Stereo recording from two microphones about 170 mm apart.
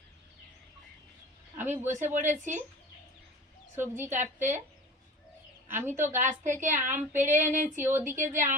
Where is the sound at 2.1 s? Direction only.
45° right (ahead or behind).